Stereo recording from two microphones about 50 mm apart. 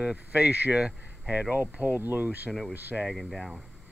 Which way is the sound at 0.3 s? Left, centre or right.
Right.